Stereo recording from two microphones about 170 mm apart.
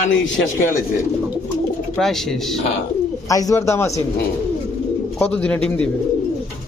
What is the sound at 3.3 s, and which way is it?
Speech, 20° left (ahead or behind).